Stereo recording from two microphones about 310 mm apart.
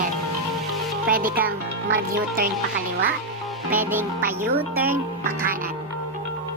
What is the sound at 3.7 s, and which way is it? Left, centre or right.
Speech, centre.